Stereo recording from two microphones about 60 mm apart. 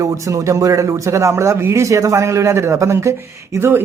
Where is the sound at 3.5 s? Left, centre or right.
Right.